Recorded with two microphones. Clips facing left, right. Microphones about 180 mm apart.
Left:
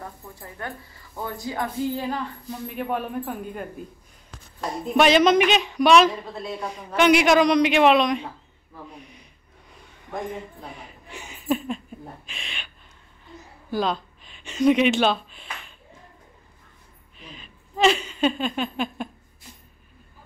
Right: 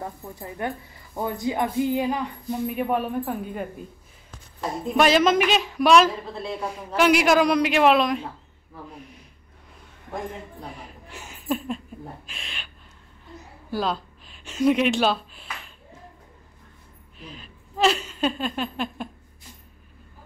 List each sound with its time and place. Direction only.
0.0 s a woman's voice: 20° right (ahead or behind); by 9.2 s centre (ahead or behind)
10.7 s speech: centre (ahead or behind)
17.2 s a sound: centre (ahead or behind)